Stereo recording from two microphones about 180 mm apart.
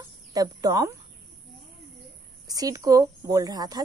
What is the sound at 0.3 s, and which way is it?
Speech, 20° right (ahead or behind).